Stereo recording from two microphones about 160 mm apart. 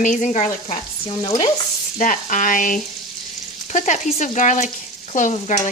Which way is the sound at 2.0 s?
55° left (ahead or behind).